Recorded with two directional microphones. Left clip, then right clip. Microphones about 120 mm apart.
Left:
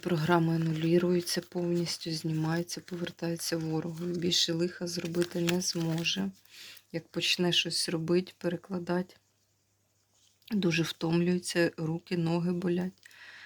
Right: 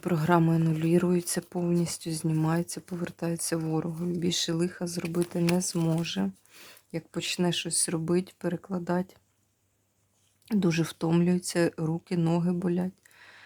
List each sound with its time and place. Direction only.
0.0 s speech: 25° right (ahead or behind)
10.4 s speech: 35° right (ahead or behind)